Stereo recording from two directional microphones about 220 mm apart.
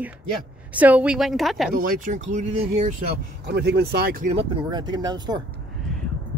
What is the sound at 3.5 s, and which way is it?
Speech, 50° right (ahead or behind).